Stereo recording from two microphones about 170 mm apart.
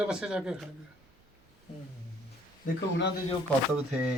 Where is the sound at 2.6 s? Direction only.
80° left.